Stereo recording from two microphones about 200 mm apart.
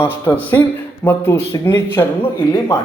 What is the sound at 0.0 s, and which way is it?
Speech, 10° left (ahead or behind).